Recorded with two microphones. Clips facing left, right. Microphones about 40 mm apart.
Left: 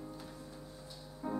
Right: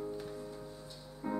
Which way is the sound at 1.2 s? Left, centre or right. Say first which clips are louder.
Right 1 dB; centre.